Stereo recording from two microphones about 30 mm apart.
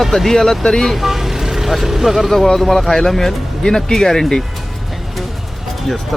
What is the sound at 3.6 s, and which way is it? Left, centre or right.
Speech, left.